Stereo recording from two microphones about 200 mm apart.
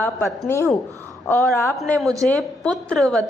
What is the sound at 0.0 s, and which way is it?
A woman's voice, 10° left (ahead or behind).